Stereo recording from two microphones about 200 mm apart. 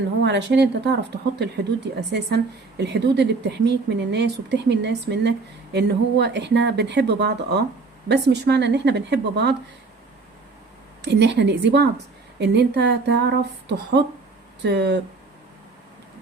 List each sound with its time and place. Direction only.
0.3 s a woman's voice: 60° right (ahead or behind)
11.0 s a woman's voice: 55° right (ahead or behind)